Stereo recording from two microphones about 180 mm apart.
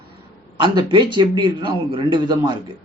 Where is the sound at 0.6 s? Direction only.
25° right (ahead or behind).